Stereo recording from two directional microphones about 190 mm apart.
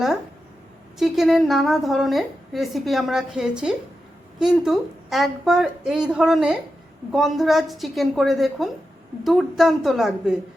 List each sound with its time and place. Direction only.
0.9 s a woman's voice: centre (ahead or behind)